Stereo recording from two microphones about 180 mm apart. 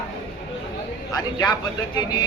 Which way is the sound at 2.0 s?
25° left (ahead or behind).